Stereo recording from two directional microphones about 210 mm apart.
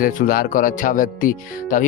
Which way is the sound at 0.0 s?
40° left (ahead or behind).